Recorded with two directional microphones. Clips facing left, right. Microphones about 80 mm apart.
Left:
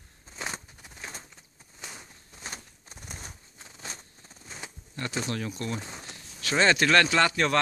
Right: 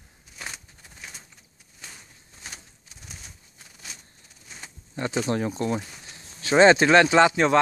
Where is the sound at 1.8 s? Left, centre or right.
Left.